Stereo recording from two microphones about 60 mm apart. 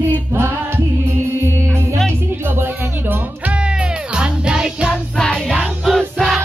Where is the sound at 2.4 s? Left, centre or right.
Right.